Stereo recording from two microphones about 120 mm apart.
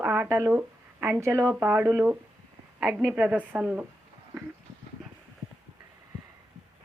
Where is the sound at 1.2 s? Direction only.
25° right (ahead or behind).